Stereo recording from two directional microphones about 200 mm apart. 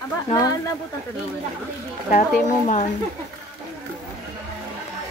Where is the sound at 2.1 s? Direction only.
40° left (ahead or behind).